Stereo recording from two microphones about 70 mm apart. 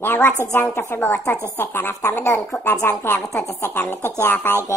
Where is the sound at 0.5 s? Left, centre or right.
Left.